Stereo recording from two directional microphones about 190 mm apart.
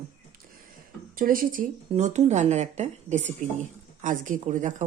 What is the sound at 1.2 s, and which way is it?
Speech, 45° right (ahead or behind).